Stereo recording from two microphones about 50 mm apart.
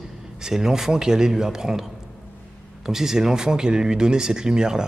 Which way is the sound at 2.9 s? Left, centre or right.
Centre.